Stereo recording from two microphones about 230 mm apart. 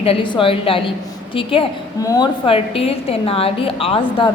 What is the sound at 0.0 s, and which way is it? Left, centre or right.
A woman's voice, left.